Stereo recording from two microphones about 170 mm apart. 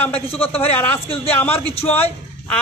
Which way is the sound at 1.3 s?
10° left (ahead or behind).